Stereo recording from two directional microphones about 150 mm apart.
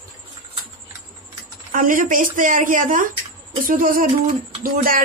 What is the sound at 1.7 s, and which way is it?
Speech, 65° right (ahead or behind).